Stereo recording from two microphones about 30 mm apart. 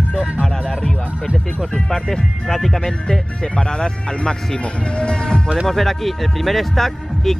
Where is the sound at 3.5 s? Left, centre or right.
Left.